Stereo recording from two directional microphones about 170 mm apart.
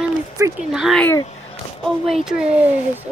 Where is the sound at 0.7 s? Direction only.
Centre (ahead or behind).